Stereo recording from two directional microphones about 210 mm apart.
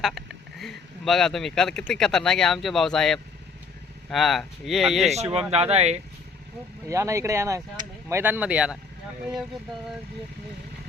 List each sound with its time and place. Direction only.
0.0 s speech: centre (ahead or behind)
5.0 s speech: 30° right (ahead or behind)
6.8 s speech: 15° right (ahead or behind)